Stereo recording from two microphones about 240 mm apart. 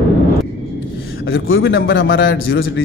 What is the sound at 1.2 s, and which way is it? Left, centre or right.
A man's voice, left.